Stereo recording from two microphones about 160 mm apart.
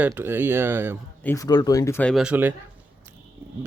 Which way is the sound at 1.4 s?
25° left (ahead or behind).